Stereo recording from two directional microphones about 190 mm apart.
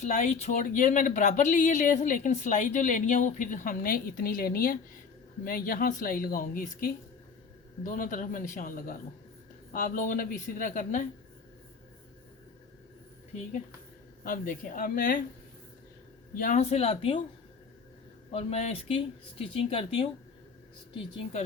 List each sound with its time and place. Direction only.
0.0 s speech: 35° left (ahead or behind)
14.3 s speech: 45° left (ahead or behind)
16.3 s speech: 45° left (ahead or behind)
18.3 s speech: 30° left (ahead or behind)